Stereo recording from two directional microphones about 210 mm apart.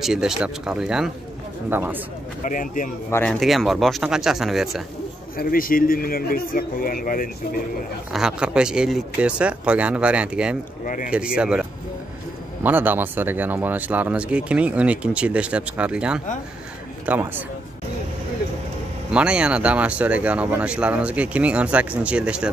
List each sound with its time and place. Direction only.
0.0 s speech: centre (ahead or behind)
2.4 s speech: 40° left (ahead or behind)
3.1 s speech: 5° left (ahead or behind)
5.4 s speech: 45° left (ahead or behind)
8.1 s speech: 5° right (ahead or behind)
12.6 s speech: 10° right (ahead or behind)
19.1 s speech: 5° right (ahead or behind)